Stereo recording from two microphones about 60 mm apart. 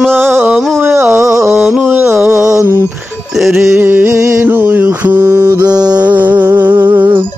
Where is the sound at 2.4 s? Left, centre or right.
Centre.